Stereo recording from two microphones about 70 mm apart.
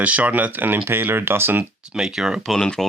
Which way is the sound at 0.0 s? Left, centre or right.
Right.